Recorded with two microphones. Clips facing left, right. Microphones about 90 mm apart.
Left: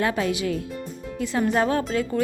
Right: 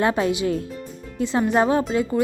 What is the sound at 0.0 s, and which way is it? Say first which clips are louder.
A woman's voice: right 3 dB; 25° right (ahead or behind).